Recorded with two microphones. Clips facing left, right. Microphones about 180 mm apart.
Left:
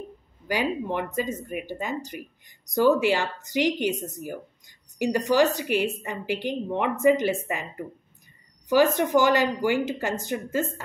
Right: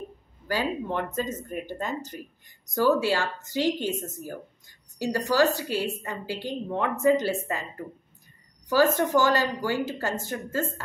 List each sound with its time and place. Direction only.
0.5 s speech: 15° left (ahead or behind)